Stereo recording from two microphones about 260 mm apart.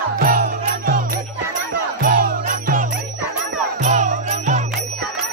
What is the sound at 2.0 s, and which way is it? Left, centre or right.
Jingle bell, right.